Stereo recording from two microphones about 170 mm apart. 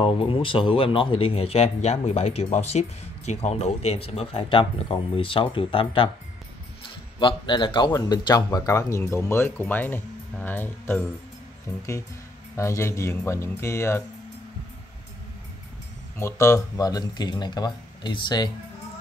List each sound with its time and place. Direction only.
0.0 s speech: 30° left (ahead or behind)
7.2 s speech: 30° left (ahead or behind); by 11.1 s 10° left (ahead or behind)
12.5 s speech: 15° left (ahead or behind)
16.2 s speech: 15° left (ahead or behind)